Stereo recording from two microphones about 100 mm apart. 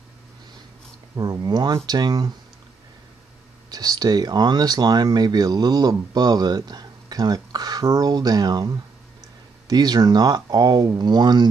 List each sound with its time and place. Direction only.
1.1 s speech: 35° right (ahead or behind)
3.7 s speech: 40° right (ahead or behind)